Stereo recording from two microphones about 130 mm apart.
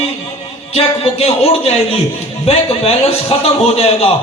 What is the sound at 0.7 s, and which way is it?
A man's voice, 50° left (ahead or behind).